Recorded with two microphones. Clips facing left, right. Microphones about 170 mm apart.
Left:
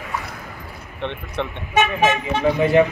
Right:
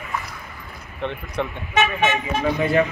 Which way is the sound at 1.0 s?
Centre (ahead or behind).